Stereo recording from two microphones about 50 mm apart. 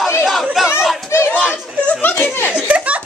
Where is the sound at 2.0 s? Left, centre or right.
Left.